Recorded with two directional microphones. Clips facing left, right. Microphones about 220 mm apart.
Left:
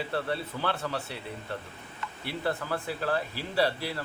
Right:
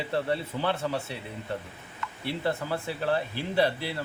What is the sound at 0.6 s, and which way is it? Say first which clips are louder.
Speech: right 2 dB; 20° right (ahead or behind).